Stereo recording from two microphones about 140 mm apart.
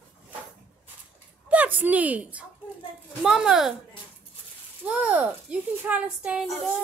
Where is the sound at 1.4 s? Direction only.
10° right (ahead or behind).